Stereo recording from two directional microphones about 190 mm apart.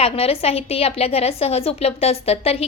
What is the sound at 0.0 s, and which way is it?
A woman's voice, 30° left (ahead or behind).